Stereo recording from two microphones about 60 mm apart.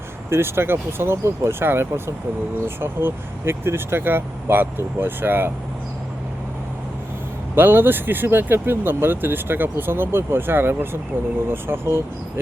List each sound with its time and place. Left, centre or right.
0.3 s speech: right
7.5 s speech: right